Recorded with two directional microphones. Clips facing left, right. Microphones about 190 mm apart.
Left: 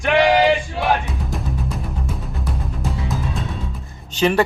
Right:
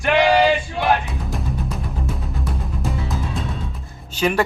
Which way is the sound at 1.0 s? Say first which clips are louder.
Even; centre (ahead or behind).